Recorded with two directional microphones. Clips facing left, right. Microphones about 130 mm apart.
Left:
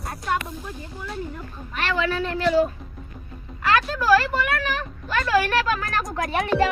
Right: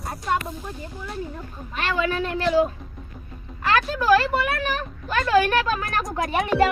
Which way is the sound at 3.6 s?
25° right (ahead or behind).